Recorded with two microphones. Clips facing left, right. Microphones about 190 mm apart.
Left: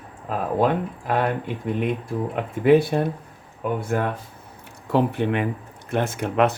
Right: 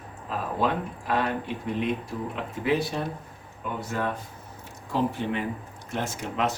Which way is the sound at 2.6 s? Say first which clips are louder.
Left 10 dB; 55° left (ahead or behind).